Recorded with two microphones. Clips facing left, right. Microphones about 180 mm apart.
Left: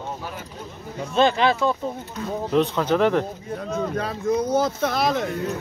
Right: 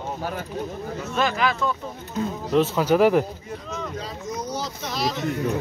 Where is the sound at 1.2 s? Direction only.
30° left (ahead or behind).